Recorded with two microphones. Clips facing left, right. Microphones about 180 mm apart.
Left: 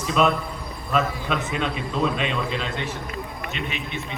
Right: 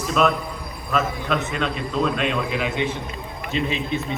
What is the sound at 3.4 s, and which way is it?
Speech, 30° right (ahead or behind).